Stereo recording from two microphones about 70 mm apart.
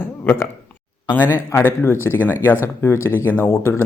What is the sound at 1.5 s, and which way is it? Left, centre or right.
A man's voice, left.